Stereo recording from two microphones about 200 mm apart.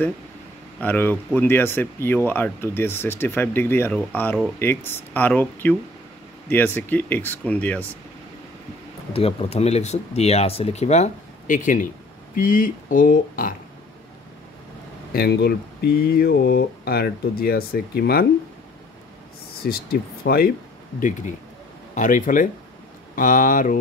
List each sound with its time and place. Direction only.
0.7 s speech: 10° left (ahead or behind)
9.1 s speech: 30° left (ahead or behind)
15.1 s speech: 50° left (ahead or behind)
19.6 s speech: 50° left (ahead or behind)
21.9 s speech: 40° left (ahead or behind)